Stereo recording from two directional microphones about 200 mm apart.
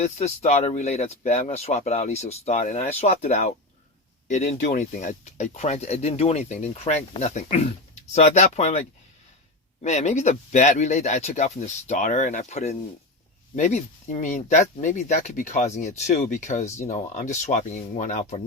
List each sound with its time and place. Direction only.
0.0 s speech: 35° left (ahead or behind)
9.8 s speech: 35° left (ahead or behind)